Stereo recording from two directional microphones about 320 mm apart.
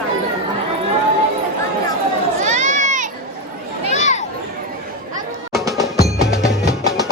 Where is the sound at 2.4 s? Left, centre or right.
Right.